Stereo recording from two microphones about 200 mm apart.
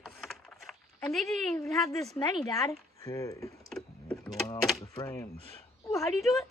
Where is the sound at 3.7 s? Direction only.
Centre (ahead or behind).